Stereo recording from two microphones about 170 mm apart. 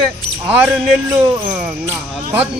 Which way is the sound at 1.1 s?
5° right (ahead or behind).